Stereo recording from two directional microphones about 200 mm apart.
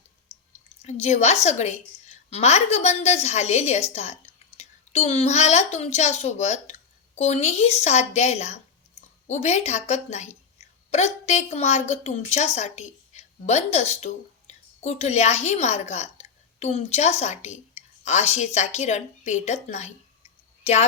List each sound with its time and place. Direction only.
0.8 s a woman's voice: 35° left (ahead or behind)